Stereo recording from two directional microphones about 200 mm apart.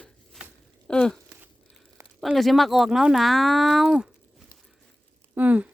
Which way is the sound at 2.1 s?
Centre (ahead or behind).